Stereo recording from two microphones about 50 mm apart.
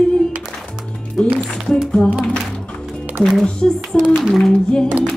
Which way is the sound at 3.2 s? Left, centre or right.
Centre.